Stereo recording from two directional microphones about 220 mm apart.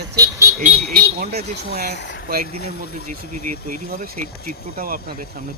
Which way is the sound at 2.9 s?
40° right (ahead or behind).